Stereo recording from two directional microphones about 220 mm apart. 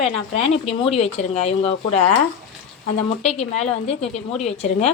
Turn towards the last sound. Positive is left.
turn(degrees=30)  # may be behind; listen again after turning